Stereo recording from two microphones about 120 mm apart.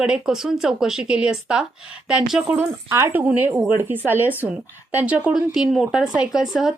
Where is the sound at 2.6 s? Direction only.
20° right (ahead or behind).